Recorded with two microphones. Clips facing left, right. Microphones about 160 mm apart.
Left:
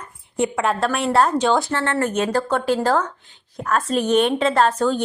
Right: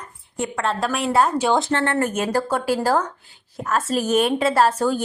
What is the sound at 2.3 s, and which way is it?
A woman's voice, 10° right (ahead or behind).